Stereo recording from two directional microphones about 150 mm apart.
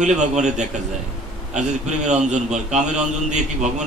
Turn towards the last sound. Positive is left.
turn(degrees=-50)  # may be behind; listen again after turning